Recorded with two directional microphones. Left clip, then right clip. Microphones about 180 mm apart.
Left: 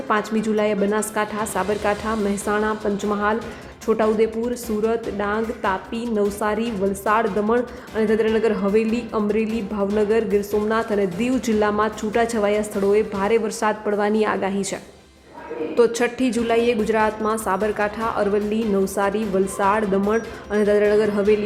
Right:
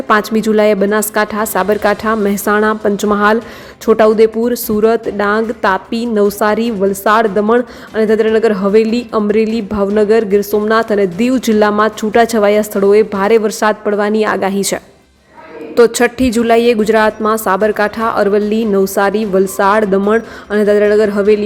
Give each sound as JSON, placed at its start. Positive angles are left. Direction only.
{"t": 0.1, "sound": "a woman's voice", "side_deg": -30}